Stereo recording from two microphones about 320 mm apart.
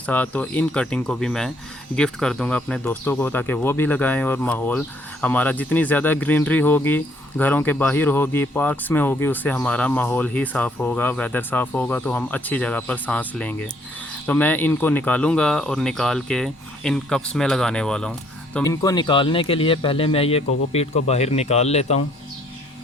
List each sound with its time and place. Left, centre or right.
0.0 s speech: centre